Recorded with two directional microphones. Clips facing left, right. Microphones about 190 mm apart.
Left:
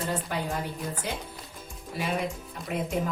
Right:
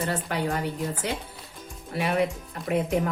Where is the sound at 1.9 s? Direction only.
65° right (ahead or behind).